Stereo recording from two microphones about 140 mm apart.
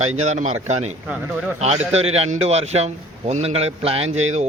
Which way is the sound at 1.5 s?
50° right (ahead or behind).